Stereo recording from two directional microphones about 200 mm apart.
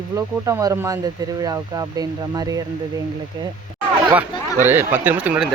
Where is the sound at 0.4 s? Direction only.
15° right (ahead or behind).